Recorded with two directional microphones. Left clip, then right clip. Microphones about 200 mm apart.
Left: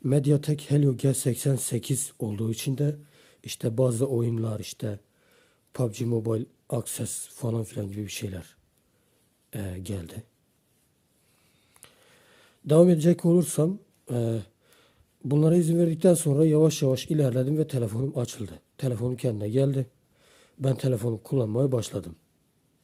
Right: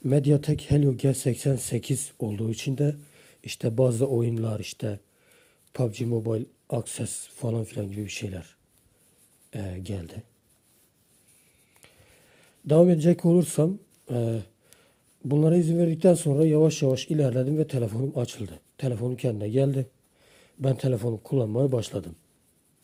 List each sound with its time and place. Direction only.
0.0 s speech: 15° left (ahead or behind)
11.7 s speech: 25° left (ahead or behind)